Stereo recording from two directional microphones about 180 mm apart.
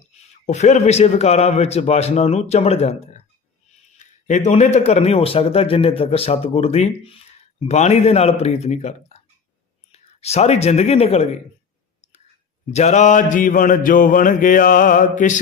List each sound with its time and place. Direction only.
0.4 s speech: 40° left (ahead or behind)
12.7 s mantra: 40° left (ahead or behind)